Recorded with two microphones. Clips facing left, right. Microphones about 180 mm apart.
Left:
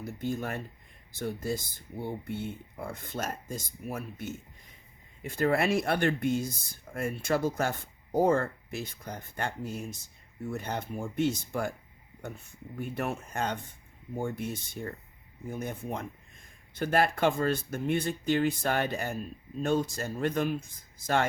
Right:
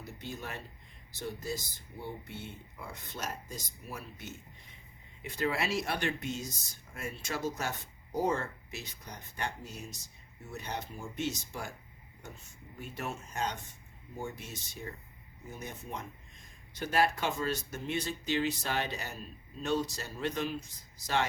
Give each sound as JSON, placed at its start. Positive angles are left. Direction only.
{"t": 0.0, "sound": "speech", "side_deg": 50}